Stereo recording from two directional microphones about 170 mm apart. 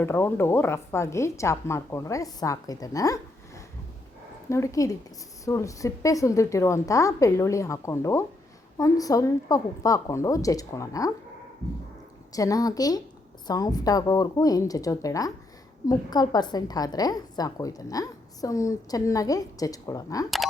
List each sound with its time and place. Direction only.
0.0 s a woman's voice: 15° left (ahead or behind)
12.3 s a woman's voice: 20° left (ahead or behind)